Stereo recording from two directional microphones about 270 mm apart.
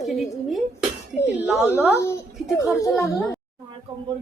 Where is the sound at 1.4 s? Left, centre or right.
Centre.